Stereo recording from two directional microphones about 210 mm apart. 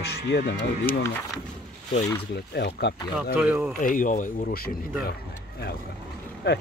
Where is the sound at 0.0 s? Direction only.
55° left (ahead or behind).